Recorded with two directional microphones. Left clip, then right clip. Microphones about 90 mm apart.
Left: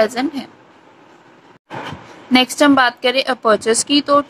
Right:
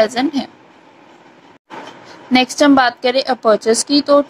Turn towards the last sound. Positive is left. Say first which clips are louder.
# right 1 dB
turn(degrees=-15)  # may be behind; listen again after turning